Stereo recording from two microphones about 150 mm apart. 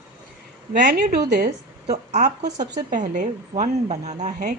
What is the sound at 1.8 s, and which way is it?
A woman's voice, 55° right (ahead or behind).